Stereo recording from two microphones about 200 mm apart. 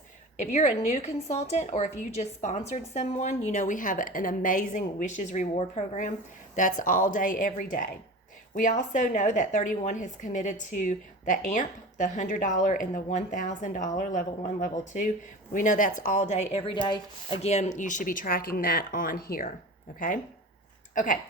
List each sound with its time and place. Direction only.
0.3 s a woman's voice: 35° left (ahead or behind)
20.9 s speech: 40° left (ahead or behind)